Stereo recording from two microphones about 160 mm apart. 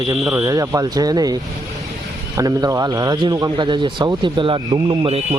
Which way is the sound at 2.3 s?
20° right (ahead or behind).